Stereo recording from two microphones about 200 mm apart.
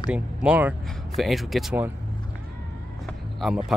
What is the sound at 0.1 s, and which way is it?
Speech, 5° right (ahead or behind).